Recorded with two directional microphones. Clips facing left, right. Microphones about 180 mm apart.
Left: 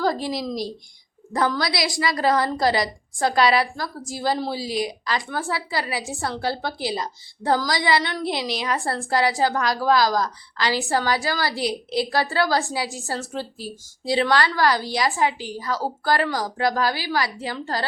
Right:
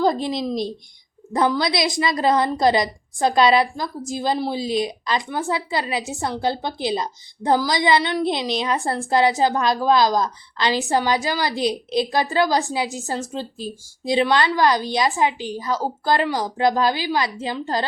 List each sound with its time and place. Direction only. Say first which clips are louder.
0.0 s a woman's voice: right 3 dB; 20° right (ahead or behind)